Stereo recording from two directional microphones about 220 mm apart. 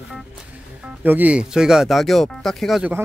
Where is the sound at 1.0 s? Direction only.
10° right (ahead or behind).